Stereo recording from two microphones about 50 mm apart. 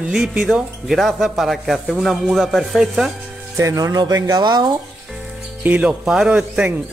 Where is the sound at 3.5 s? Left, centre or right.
Right.